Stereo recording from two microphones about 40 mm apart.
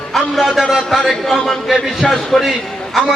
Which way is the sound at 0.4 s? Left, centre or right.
Centre.